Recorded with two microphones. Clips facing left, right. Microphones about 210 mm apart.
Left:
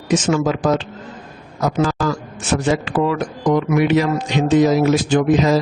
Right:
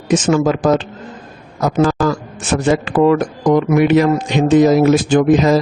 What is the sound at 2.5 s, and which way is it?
Speech, 50° right (ahead or behind).